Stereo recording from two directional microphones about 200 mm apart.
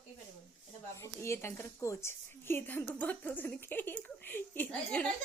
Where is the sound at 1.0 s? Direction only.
15° left (ahead or behind).